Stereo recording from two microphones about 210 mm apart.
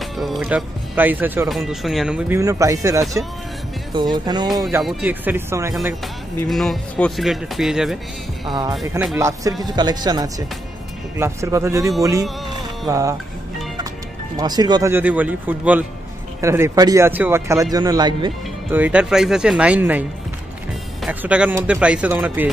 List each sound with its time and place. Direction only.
0.2 s speech: 5° right (ahead or behind); by 4.5 s 20° right (ahead or behind)
4.5 s speech: centre (ahead or behind)
6.5 s speech: centre (ahead or behind)
8.5 s speech: 20° right (ahead or behind)
14.3 s speech: 20° right (ahead or behind)
18.7 s speech: 5° right (ahead or behind)